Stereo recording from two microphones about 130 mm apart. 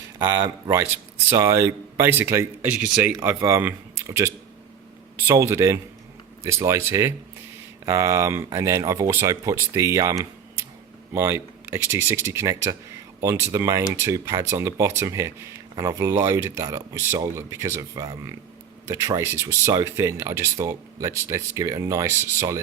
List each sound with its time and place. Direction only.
0.2 s speech: 25° right (ahead or behind)
5.3 s speech: 20° right (ahead or behind)